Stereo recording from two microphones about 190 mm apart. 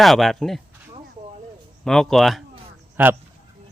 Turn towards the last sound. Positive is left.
turn(degrees=-10)  # may be behind; listen again after turning